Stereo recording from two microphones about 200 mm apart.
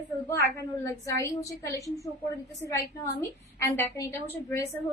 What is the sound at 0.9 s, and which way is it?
A woman's voice, 15° left (ahead or behind).